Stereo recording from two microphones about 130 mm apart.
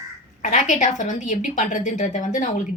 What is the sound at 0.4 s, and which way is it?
A woman's voice, 60° left (ahead or behind).